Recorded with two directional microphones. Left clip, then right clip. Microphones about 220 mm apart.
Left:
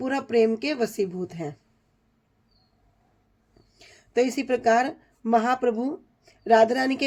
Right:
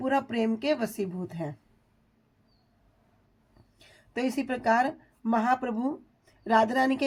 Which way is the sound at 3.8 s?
20° right (ahead or behind).